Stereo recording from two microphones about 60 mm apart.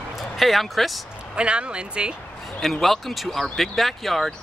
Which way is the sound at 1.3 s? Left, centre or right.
Centre.